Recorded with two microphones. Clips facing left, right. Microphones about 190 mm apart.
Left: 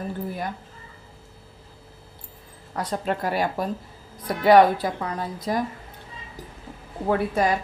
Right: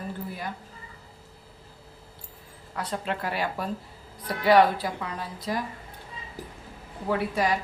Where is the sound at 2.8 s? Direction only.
40° left (ahead or behind).